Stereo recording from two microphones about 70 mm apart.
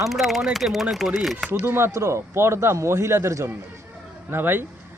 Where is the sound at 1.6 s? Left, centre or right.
Right.